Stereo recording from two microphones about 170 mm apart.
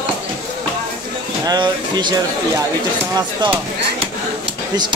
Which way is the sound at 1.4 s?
25° right (ahead or behind).